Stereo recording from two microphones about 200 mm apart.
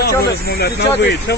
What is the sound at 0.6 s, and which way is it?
Speech, 55° left (ahead or behind).